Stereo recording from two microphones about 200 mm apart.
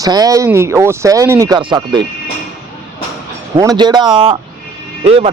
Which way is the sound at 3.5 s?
20° right (ahead or behind).